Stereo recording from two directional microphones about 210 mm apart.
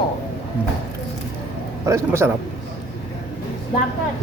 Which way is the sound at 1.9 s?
10° right (ahead or behind).